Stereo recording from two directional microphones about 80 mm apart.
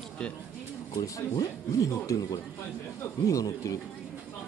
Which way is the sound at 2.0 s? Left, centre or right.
Left.